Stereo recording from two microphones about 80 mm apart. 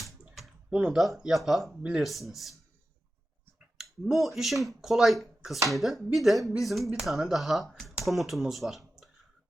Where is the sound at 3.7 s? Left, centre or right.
Centre.